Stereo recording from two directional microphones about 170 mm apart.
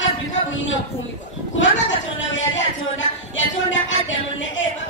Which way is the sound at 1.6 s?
90° left.